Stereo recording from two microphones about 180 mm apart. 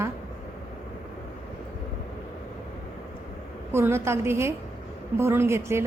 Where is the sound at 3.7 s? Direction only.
15° right (ahead or behind).